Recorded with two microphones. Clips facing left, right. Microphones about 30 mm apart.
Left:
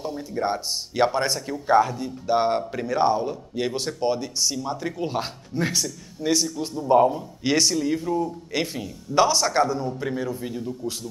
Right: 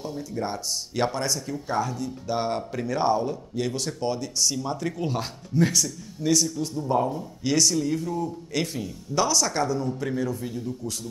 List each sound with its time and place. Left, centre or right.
0.2 s speech: left
1.2 s a man's voice: left